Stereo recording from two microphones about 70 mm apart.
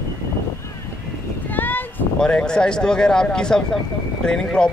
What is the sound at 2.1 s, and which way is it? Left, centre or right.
A man's voice, centre.